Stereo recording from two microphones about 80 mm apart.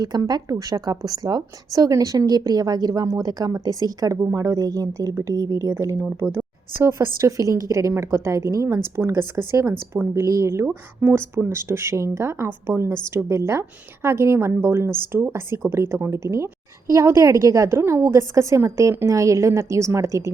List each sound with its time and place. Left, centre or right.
0.0 s a woman's voice: right